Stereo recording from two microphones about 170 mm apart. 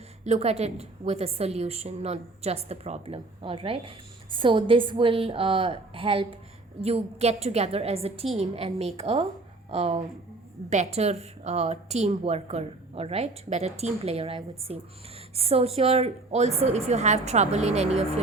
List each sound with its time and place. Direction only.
0.3 s a woman's voice: 40° right (ahead or behind)